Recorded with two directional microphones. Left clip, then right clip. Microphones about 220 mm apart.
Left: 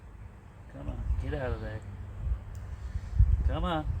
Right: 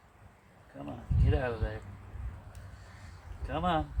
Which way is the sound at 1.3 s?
30° right (ahead or behind).